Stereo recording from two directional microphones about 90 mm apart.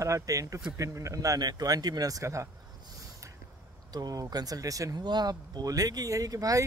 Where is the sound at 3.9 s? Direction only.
45° right (ahead or behind).